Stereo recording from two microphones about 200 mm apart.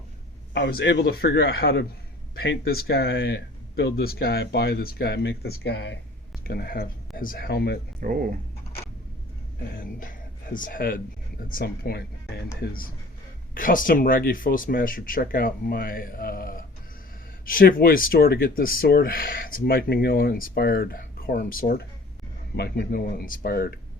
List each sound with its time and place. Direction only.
0.5 s speech: 55° left (ahead or behind)
6.4 s speech: 50° left (ahead or behind)
8.0 s speech: 45° right (ahead or behind)
10.0 s a sound: 45° left (ahead or behind)
11.4 s speech: 45° left (ahead or behind)
13.5 s speech: 45° left (ahead or behind)